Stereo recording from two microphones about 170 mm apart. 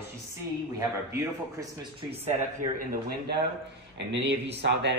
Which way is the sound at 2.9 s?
70° right (ahead or behind).